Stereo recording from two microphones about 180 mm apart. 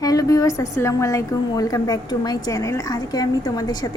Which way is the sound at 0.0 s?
20° left (ahead or behind).